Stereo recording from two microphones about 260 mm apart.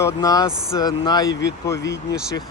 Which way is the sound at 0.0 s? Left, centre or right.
Centre.